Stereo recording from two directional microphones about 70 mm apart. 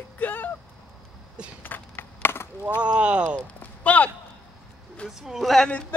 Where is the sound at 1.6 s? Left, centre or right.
Left.